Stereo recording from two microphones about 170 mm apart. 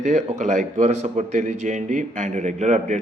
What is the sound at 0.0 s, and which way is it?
A man's voice, 45° right (ahead or behind).